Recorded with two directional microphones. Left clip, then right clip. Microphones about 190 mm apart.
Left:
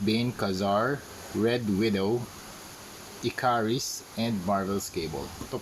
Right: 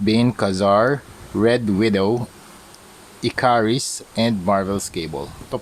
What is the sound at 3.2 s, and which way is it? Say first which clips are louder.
Speech: right 9 dB; 45° right (ahead or behind).